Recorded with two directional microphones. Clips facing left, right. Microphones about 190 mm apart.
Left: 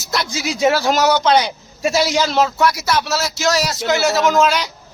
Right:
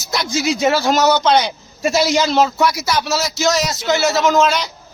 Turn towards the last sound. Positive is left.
turn(degrees=5)  # may be behind; listen again after turning